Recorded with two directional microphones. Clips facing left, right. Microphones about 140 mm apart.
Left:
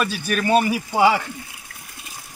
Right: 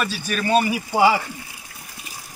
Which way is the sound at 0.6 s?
5° right (ahead or behind).